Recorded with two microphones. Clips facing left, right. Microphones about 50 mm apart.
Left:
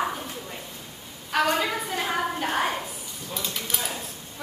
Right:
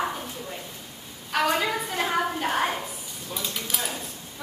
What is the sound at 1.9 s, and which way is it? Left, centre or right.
Speech, centre.